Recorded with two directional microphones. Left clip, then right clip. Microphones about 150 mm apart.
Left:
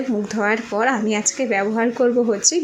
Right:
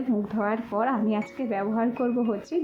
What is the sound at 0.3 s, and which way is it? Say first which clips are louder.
A woman's voice: left 8 dB; 20° left (ahead or behind).